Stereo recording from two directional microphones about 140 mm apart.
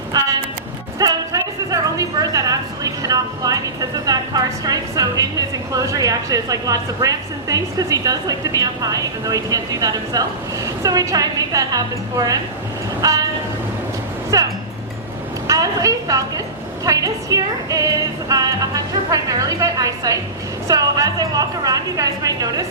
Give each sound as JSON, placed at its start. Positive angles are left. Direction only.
{"t": 0.9, "sound": "a sound", "side_deg": -25}
{"t": 5.7, "sound": "a woman's voice", "side_deg": -25}
{"t": 13.0, "sound": "train", "side_deg": -25}
{"t": 14.3, "sound": "music", "side_deg": -25}
{"t": 15.4, "sound": "a sound", "side_deg": -25}
{"t": 16.8, "sound": "a woman's voice", "side_deg": -25}